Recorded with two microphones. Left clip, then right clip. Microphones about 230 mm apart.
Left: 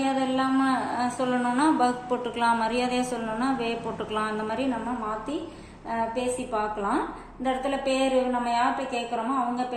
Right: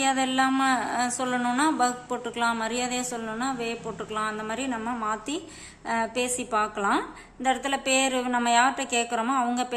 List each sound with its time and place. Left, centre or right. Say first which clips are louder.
0.0 s speech: right 2 dB; right
5.9 s speech: even; right